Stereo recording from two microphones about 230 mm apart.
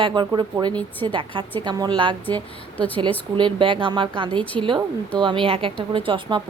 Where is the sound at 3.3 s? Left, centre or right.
Right.